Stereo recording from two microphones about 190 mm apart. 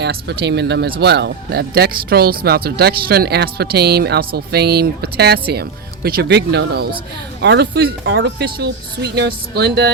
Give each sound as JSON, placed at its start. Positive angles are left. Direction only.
{"t": 0.0, "sound": "speech", "side_deg": -65}